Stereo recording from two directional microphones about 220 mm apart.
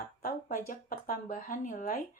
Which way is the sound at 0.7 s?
40° left (ahead or behind).